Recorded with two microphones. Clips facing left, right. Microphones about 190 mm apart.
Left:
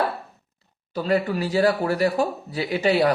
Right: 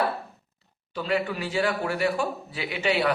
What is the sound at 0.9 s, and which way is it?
Speech, 40° left (ahead or behind).